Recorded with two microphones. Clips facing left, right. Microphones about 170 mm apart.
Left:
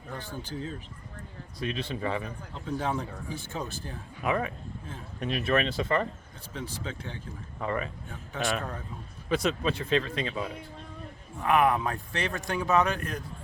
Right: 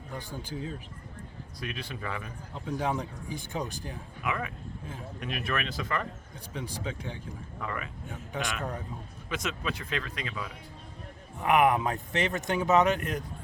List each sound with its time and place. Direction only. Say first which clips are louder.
0.1 s speech: left 1 dB; 10° right (ahead or behind)
1.5 s speech: left 6 dB; 25° left (ahead or behind)
2.6 s speech: even; 15° right (ahead or behind)
4.2 s speech: left 5 dB; 35° left (ahead or behind)
6.5 s speech: right 1 dB; 15° right (ahead or behind)
7.6 s speech: left 6 dB; 30° left (ahead or behind)
8.1 s speech: even; 15° right (ahead or behind)
9.3 s speech: left 7 dB; 35° left (ahead or behind)
11.3 s speech: even; 20° right (ahead or behind)